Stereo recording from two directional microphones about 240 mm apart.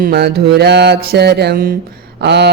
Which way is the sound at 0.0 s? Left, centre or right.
Right.